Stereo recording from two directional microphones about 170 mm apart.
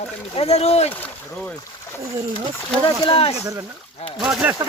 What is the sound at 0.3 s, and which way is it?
Speech, 35° left (ahead or behind).